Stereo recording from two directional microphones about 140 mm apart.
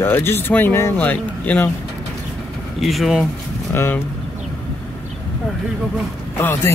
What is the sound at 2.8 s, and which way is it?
Speech, centre (ahead or behind).